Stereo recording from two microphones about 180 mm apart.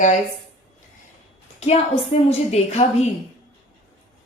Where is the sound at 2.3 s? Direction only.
35° left (ahead or behind).